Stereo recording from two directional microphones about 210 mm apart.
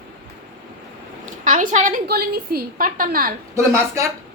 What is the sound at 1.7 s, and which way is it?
A woman's voice, 40° right (ahead or behind).